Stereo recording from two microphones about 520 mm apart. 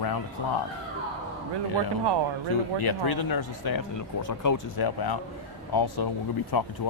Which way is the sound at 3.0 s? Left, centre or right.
Left.